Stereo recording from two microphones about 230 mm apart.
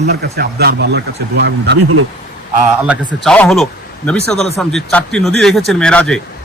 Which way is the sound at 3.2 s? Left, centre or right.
Centre.